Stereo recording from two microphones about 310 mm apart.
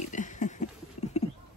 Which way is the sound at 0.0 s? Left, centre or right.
Left.